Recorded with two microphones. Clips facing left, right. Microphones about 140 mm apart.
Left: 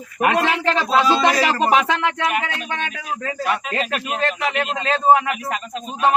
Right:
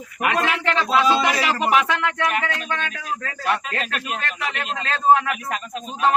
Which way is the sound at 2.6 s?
10° left (ahead or behind).